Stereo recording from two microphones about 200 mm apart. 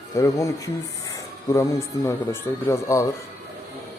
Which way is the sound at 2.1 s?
15° left (ahead or behind).